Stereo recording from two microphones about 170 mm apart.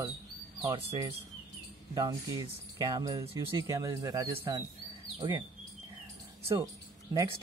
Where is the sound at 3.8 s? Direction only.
20° right (ahead or behind).